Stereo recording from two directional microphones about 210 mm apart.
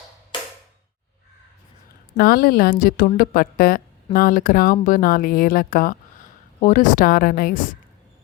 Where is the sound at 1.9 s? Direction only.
45° left (ahead or behind).